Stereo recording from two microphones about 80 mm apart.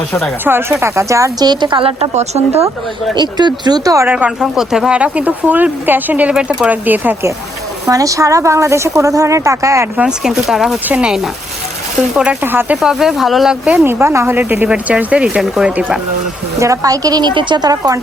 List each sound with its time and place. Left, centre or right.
0.4 s a woman's voice: right
1.4 s a woman's voice: right
3.2 s speech: right
4.0 s speech: centre
4.5 s speech: centre; by 7.3 s right
7.9 s a woman's voice: right
10.0 s speech: centre
10.8 s speech: centre
12.4 s speech: right
12.7 s speech: centre
13.8 s a woman's voice: right
14.3 s speech: right; by 16.0 s centre
16.6 s a woman's voice: right
17.7 s a woman's voice: right